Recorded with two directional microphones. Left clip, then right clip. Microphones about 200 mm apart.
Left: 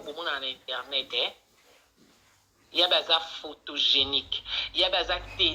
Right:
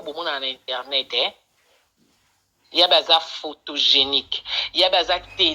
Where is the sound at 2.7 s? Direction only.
45° right (ahead or behind).